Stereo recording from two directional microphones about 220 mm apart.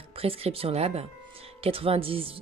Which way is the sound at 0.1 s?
25° right (ahead or behind).